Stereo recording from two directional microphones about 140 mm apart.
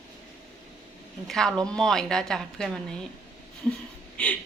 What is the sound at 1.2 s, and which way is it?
A woman's voice, centre (ahead or behind).